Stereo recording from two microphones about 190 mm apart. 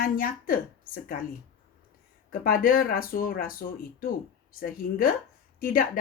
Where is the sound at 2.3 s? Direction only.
45° left (ahead or behind).